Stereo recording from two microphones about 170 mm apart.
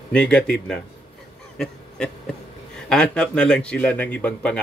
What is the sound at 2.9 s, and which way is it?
A man's voice, 5° left (ahead or behind).